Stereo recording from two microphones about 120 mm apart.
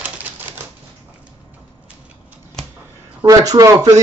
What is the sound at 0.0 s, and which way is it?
Typewriter, 15° right (ahead or behind).